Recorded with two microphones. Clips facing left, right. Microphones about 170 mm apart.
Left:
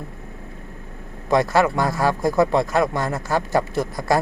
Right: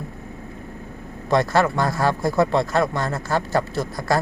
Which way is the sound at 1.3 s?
10° left (ahead or behind).